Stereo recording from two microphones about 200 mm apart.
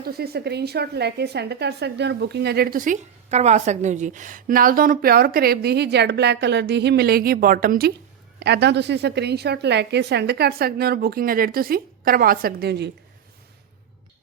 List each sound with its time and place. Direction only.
0.0 s a woman's voice: 50° right (ahead or behind)